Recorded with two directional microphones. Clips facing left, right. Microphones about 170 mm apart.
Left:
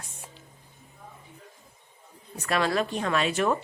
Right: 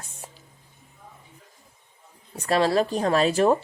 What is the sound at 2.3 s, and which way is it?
Speech, 30° right (ahead or behind).